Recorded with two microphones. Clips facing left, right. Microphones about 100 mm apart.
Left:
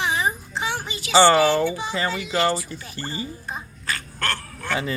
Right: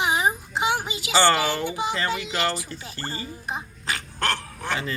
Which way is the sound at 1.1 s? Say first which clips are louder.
Left 5 dB; 20° left (ahead or behind).